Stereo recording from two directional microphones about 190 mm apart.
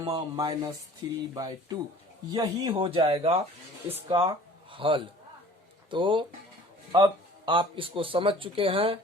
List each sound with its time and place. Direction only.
0.0 s speech: 20° right (ahead or behind)